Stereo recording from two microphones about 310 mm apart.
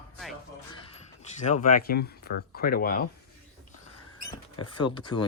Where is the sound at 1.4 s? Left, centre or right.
Left.